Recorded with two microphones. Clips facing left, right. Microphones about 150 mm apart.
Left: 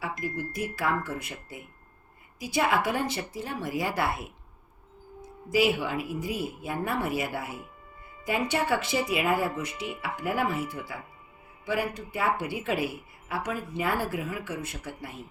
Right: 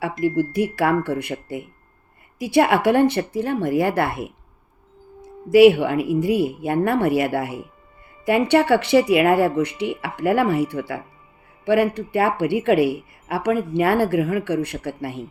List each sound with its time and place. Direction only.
0.2 s speech: 70° right (ahead or behind)
5.5 s speech: 65° right (ahead or behind)